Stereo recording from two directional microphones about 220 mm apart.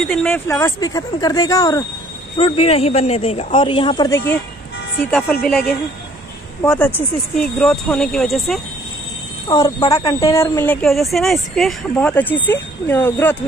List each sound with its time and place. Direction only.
0.0 s a man's voice: 5° left (ahead or behind); by 4.2 s 20° left (ahead or behind)
5.4 s speech: centre (ahead or behind)
9.5 s speech: 15° left (ahead or behind)